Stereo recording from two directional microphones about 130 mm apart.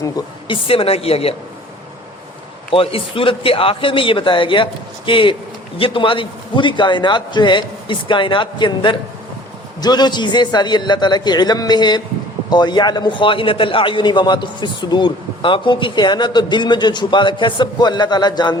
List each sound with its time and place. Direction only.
0.4 s a woman's voice: 45° left (ahead or behind)
2.7 s speech: 45° left (ahead or behind)